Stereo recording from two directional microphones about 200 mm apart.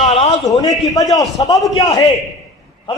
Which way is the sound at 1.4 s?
25° left (ahead or behind).